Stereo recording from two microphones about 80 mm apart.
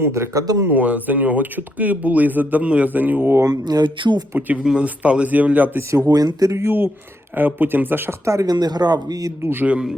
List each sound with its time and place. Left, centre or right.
0.0 s speech: right
0.7 s speech: right
3.4 s speech: right
4.4 s speech: right
6.1 s speech: right
6.7 s speech: right
8.2 s speech: right
8.5 s speech: right
9.4 s speech: right